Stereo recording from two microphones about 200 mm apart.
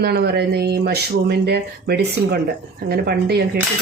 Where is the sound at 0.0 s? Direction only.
55° right (ahead or behind).